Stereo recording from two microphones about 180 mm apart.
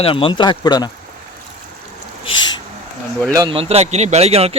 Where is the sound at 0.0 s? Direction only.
30° left (ahead or behind).